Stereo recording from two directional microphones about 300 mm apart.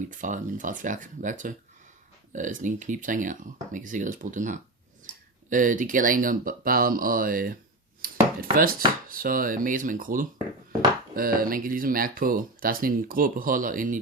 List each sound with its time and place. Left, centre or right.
0.1 s speech: right
8.0 s dishes: right
9.0 s speech: right